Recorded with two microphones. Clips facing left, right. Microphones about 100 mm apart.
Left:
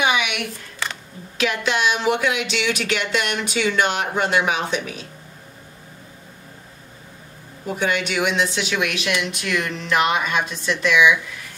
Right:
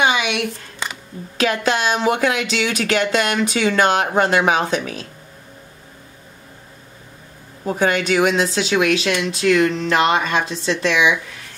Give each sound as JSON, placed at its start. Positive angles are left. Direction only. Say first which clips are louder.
{"t": 0.0, "sound": "a sound", "louder": "right 3 dB", "side_deg": -30}
{"t": 1.4, "sound": "speech", "louder": "right 3 dB", "side_deg": -40}
{"t": 7.6, "sound": "speech", "louder": "right 4 dB", "side_deg": -40}